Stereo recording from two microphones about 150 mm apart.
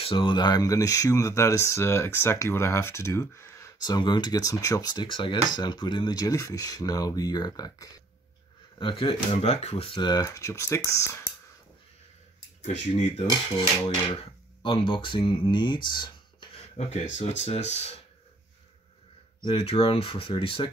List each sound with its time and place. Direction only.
0.0 s speech: 35° left (ahead or behind); by 3.9 s 15° left (ahead or behind)
3.9 s speech: 30° left (ahead or behind)
9.9 s speech: 25° left (ahead or behind)
12.6 s speech: 50° left (ahead or behind)
14.6 s speech: 35° left (ahead or behind)
16.7 s speech: 50° left (ahead or behind)
19.4 s speech: 40° left (ahead or behind)